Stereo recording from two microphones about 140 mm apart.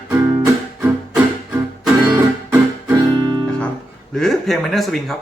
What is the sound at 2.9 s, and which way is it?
Music, 25° right (ahead or behind).